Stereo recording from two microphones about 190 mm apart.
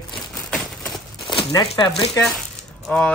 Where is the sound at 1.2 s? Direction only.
25° left (ahead or behind).